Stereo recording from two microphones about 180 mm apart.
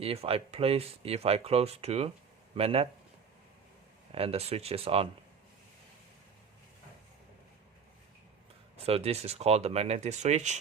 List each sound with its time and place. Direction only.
0.0 s speech: 35° right (ahead or behind)
4.1 s speech: 35° right (ahead or behind)
8.7 s speech: 35° right (ahead or behind)